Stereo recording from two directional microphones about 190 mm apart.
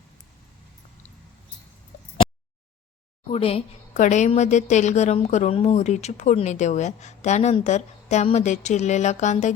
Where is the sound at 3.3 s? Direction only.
30° left (ahead or behind).